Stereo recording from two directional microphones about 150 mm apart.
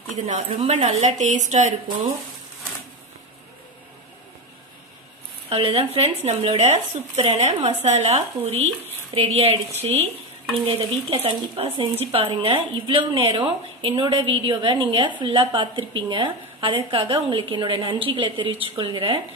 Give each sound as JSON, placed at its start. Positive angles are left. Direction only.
{"t": 0.1, "sound": "speech", "side_deg": -55}
{"t": 5.5, "sound": "speech", "side_deg": -40}